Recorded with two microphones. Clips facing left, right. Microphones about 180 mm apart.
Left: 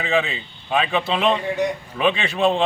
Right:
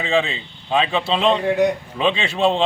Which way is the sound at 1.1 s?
5° left (ahead or behind).